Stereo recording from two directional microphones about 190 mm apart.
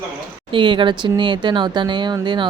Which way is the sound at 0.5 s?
25° right (ahead or behind).